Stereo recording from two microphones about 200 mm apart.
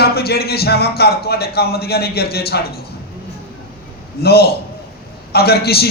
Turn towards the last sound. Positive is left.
turn(degrees=50)  # may be behind; listen again after turning